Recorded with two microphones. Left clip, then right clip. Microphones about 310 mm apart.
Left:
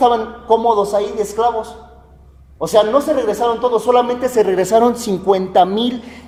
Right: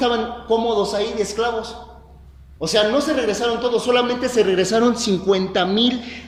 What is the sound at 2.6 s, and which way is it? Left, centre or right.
Speech, left.